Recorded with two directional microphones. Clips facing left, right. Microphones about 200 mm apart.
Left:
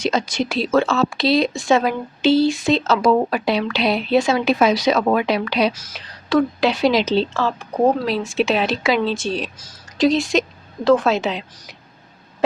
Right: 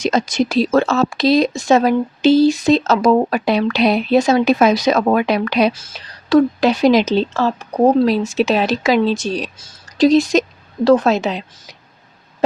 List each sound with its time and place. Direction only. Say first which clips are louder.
0.0 s speech: right 4 dB; 45° right (ahead or behind)
5.8 s speech: even; 40° right (ahead or behind)